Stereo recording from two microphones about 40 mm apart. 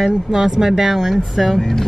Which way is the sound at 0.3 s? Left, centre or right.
Centre.